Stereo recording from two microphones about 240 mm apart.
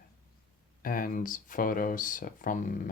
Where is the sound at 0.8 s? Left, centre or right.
Left.